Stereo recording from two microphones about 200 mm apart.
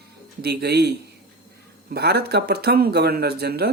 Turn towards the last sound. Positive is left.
turn(degrees=-50)  # may be behind; listen again after turning